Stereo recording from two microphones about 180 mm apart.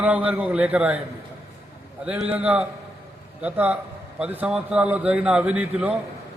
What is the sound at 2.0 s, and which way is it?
A man's voice, 5° right (ahead or behind).